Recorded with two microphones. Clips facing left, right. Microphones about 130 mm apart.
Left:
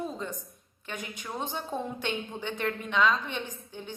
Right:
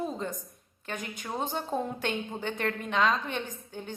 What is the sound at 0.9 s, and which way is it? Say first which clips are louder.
A woman's voice: right 2 dB; 45° right (ahead or behind).